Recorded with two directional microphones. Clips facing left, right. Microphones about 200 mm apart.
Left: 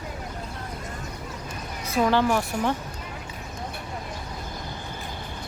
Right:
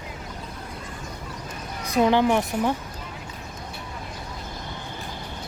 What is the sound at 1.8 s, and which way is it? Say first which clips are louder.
Speech: right 2 dB; 15° right (ahead or behind).